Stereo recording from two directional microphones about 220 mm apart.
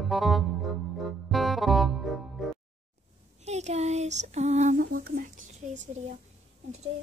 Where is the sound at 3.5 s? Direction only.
30° right (ahead or behind).